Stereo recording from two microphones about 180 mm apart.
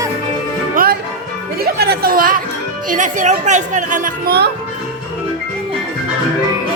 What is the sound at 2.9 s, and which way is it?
Speech, 45° right (ahead or behind).